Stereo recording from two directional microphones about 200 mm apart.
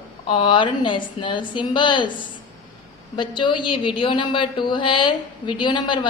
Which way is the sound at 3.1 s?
25° left (ahead or behind).